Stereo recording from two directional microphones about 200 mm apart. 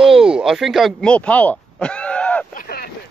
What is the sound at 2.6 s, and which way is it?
Boat, 50° left (ahead or behind).